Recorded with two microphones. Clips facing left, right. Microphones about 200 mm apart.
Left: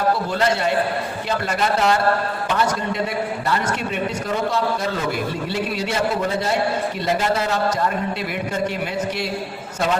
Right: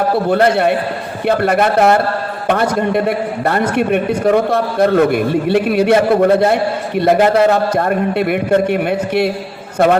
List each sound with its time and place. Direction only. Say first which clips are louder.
0.3 s a man's voice: right 8 dB; 60° right (ahead or behind)